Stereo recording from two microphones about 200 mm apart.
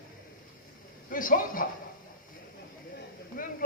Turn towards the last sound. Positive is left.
turn(degrees=45)  # may be behind; listen again after turning